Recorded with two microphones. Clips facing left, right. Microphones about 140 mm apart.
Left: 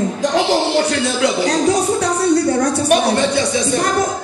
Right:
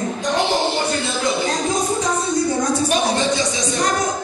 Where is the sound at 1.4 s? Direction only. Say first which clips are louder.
Left 5 dB; 70° left (ahead or behind).